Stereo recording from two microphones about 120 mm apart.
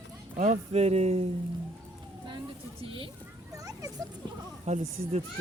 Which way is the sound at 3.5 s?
30° right (ahead or behind).